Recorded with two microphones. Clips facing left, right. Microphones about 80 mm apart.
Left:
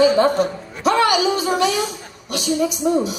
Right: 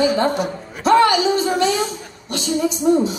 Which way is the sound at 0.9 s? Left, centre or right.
Right.